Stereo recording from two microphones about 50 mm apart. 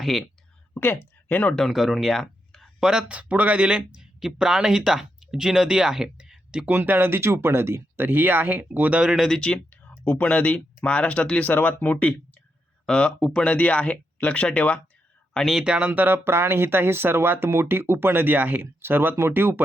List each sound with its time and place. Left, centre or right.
0.0 s speech: centre
0.7 s speech: left
1.6 s speech: centre
2.2 s a sound: centre
3.1 s speech: right
4.2 s speech: centre
6.7 s speech: right
9.6 s a sound: left
10.2 s speech: left
12.8 s speech: centre
13.4 s speech: left
15.6 s speech: centre
16.0 s speech: right
18.6 s speech: right